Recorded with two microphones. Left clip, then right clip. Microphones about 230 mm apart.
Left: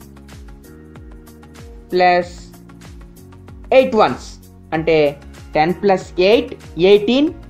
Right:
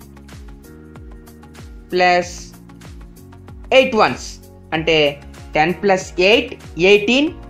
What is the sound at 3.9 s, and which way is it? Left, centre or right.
Speech, centre.